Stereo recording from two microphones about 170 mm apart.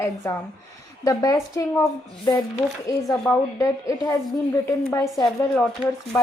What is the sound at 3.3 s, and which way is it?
A woman's voice, 20° left (ahead or behind).